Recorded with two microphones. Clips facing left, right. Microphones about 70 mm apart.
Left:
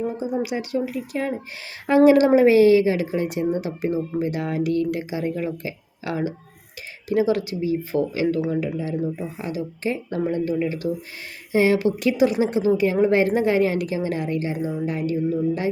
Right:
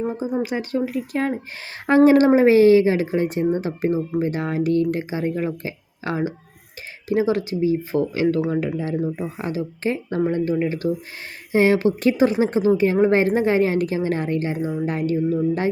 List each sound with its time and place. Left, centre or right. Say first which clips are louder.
0.0 s a woman's voice: right 1 dB; right